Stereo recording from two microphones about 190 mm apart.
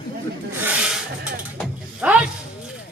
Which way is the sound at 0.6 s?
5° right (ahead or behind).